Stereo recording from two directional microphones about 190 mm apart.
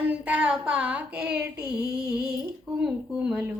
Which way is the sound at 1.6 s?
5° right (ahead or behind).